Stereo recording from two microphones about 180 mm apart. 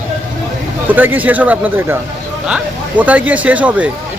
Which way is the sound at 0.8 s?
10° right (ahead or behind).